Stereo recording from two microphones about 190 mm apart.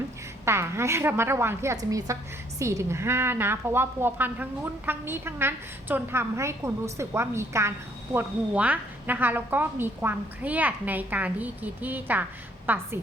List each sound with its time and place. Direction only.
0.4 s a woman's voice: 15° right (ahead or behind)